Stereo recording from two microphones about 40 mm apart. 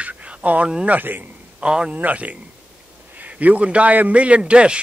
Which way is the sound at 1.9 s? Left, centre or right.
Right.